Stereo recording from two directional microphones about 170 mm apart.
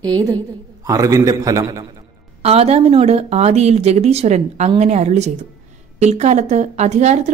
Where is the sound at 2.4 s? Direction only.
35° right (ahead or behind).